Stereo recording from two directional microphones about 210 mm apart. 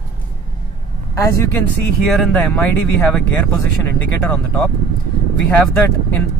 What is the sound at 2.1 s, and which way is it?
Speech, 5° left (ahead or behind).